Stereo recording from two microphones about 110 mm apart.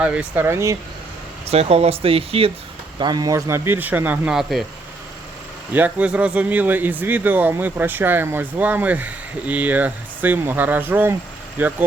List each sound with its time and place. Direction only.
0.0 s speech: 10° right (ahead or behind)
0.4 s speech: 25° right (ahead or behind)
1.5 s speech: 65° right (ahead or behind)
3.0 s speech: 40° right (ahead or behind); by 4.4 s 15° right (ahead or behind)
4.4 s speech: centre (ahead or behind)
5.7 s speech: 15° right (ahead or behind)